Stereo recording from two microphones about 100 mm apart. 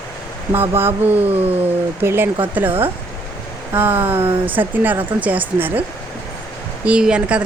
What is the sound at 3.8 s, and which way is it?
Speech, 20° right (ahead or behind).